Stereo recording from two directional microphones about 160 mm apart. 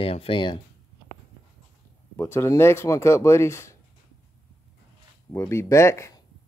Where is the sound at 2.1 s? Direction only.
15° left (ahead or behind).